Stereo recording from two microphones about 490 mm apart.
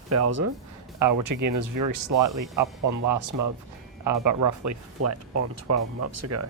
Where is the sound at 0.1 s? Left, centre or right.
Right.